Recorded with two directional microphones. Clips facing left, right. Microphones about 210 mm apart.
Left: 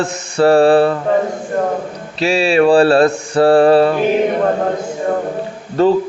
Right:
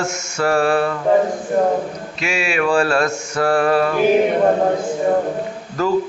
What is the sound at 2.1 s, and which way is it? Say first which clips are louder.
Mantra: left 9 dB; 35° left (ahead or behind).